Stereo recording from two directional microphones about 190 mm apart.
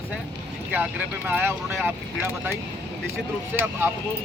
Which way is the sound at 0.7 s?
10° right (ahead or behind).